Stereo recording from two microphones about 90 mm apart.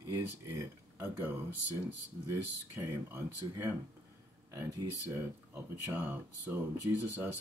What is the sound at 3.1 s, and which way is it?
Speech, 25° right (ahead or behind).